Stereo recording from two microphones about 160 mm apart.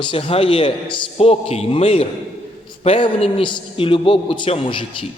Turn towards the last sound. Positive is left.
turn(degrees=30)  # may be behind; listen again after turning